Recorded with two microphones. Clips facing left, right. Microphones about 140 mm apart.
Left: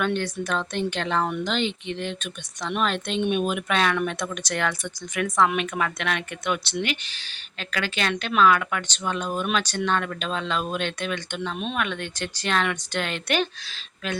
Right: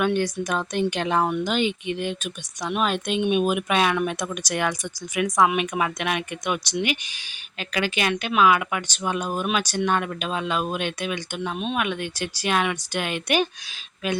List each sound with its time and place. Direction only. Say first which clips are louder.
0.0 s speech: right 3 dB; 10° right (ahead or behind)